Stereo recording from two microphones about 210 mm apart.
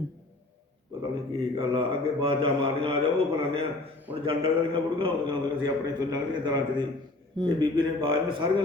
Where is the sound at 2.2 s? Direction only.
25° right (ahead or behind).